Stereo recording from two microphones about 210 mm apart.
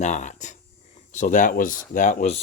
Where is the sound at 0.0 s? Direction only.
35° left (ahead or behind).